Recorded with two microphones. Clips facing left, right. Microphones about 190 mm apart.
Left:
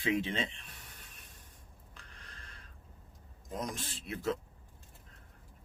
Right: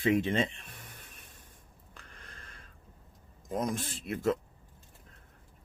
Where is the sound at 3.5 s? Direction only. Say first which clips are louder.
Right 6 dB; 50° right (ahead or behind).